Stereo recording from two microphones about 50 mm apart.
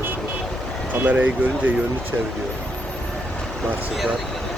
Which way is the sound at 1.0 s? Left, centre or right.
Right.